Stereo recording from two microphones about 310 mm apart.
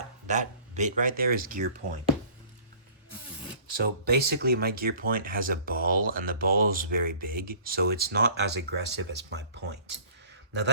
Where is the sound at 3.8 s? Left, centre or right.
Right.